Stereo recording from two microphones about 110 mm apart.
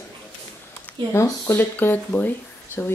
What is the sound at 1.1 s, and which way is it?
Speech, 25° left (ahead or behind).